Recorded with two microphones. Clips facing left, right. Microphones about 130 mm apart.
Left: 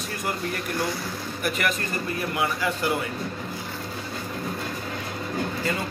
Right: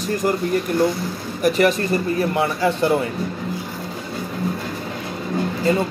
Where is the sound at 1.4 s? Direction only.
30° right (ahead or behind).